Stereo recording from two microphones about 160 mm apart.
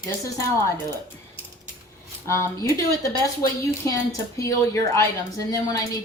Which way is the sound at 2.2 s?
20° left (ahead or behind).